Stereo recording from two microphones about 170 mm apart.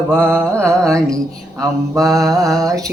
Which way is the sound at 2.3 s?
20° right (ahead or behind).